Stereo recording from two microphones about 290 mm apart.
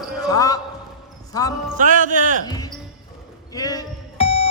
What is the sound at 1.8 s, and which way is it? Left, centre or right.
Speech, right.